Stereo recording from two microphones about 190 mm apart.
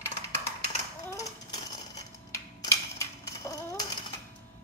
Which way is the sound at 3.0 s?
20° left (ahead or behind).